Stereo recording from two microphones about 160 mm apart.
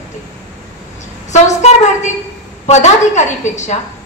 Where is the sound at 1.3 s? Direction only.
45° left (ahead or behind).